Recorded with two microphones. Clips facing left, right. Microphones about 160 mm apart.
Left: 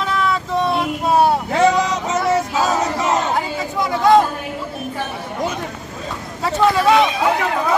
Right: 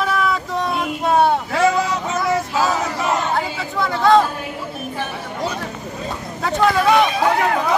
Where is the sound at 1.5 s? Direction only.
20° left (ahead or behind).